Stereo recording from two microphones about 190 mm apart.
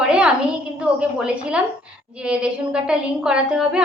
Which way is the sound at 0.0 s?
5° right (ahead or behind).